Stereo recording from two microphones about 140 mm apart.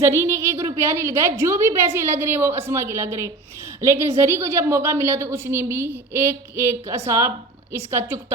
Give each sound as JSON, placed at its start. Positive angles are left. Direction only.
{"t": 0.0, "sound": "a woman's voice", "side_deg": -20}